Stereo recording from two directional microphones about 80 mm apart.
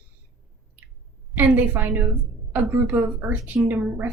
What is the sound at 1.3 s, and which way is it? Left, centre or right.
A woman's voice, right.